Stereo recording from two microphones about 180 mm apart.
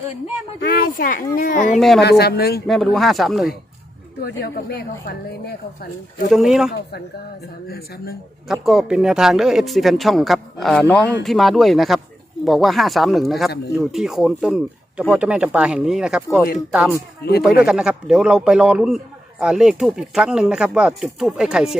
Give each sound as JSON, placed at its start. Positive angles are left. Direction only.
{"t": 0.6, "sound": "speech", "side_deg": 55}
{"t": 2.0, "sound": "a woman's voice", "side_deg": 65}
{"t": 2.6, "sound": "a man's voice", "side_deg": 0}
{"t": 4.2, "sound": "a woman's voice", "side_deg": 60}
{"t": 6.3, "sound": "a man's voice", "side_deg": 0}
{"t": 7.7, "sound": "a woman's voice", "side_deg": 60}
{"t": 8.6, "sound": "a man's voice", "side_deg": 0}